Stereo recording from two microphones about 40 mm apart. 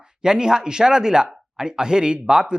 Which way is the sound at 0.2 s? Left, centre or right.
Centre.